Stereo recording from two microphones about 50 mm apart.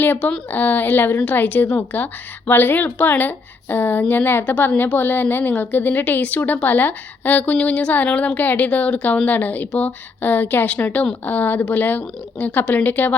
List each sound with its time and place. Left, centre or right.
0.0 s a woman's voice: left